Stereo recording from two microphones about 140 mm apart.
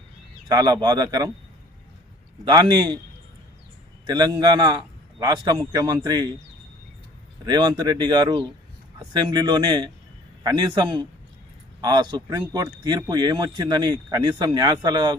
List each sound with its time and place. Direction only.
0.4 s speech: 30° right (ahead or behind)
2.4 s a man's voice: 30° right (ahead or behind)
4.0 s a man's voice: 30° right (ahead or behind)
7.4 s a man's voice: 30° right (ahead or behind)